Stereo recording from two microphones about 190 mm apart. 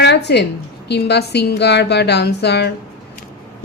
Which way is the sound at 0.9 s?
60° left (ahead or behind).